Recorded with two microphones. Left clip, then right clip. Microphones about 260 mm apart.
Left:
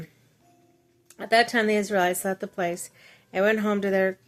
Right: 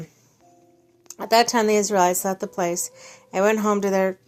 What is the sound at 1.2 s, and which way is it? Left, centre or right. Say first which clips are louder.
A woman's voice: right 3 dB; centre.